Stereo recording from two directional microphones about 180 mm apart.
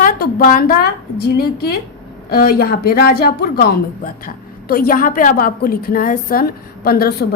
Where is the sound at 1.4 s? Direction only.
60° left (ahead or behind).